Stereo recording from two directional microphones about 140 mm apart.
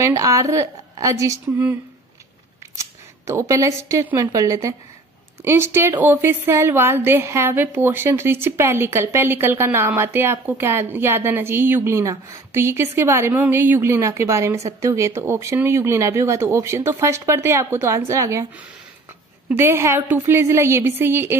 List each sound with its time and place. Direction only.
0.0 s a woman's voice: 20° right (ahead or behind)
19.5 s a woman's voice: 15° right (ahead or behind)